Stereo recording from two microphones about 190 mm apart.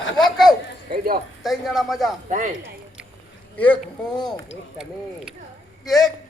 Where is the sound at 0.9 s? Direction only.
55° right (ahead or behind).